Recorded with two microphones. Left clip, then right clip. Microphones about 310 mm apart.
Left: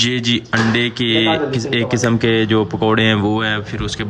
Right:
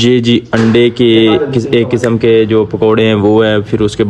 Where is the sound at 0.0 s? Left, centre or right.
Centre.